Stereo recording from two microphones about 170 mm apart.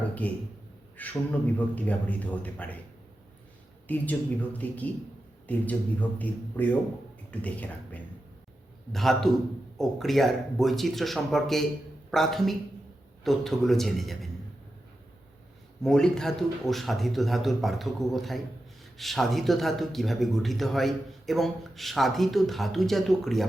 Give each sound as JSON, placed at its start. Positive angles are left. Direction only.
{"t": 0.1, "sound": "a man's voice", "side_deg": 10}
{"t": 3.8, "sound": "a man's voice", "side_deg": 10}
{"t": 15.8, "sound": "a man's voice", "side_deg": 5}